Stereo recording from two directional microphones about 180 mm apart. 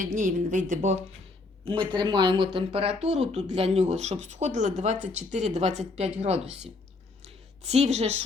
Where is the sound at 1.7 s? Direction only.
25° right (ahead or behind).